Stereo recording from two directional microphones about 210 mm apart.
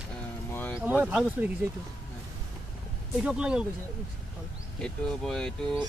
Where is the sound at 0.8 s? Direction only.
5° right (ahead or behind).